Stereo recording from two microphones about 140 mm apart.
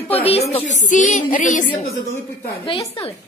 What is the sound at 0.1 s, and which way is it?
Speech, 45° left (ahead or behind).